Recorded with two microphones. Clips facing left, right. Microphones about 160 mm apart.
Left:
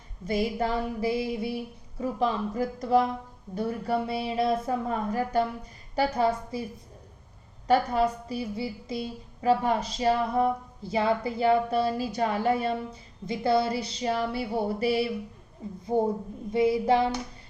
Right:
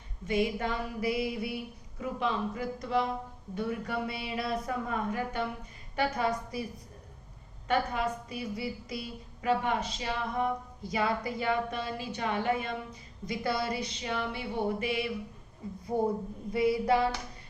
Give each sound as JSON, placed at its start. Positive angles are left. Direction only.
{"t": 0.3, "sound": "a woman's voice", "side_deg": 35}
{"t": 6.0, "sound": "female singing", "side_deg": 30}
{"t": 7.7, "sound": "a woman's voice", "side_deg": 35}
{"t": 15.9, "sound": "female singing", "side_deg": 30}